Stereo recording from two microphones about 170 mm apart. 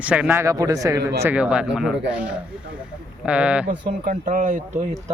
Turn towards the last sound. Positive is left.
turn(degrees=-45)  # may be behind; listen again after turning